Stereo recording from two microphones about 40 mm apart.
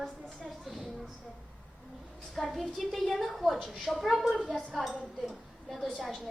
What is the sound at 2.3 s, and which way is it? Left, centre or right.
A woman's voice, centre.